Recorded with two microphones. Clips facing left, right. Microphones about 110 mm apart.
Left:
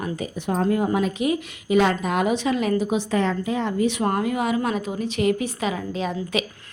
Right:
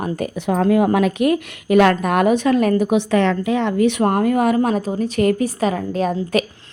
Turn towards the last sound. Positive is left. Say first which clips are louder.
# right 6 dB
turn(degrees=-45)  # may be behind; listen again after turning